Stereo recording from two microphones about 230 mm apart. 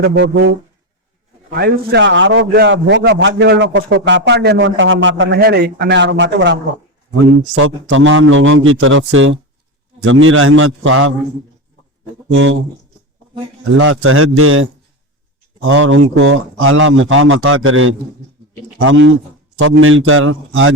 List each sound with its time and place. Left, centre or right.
0.0 s a man's voice: right
1.5 s a man's voice: right
12.3 s a man's voice: right
13.7 s a man's voice: right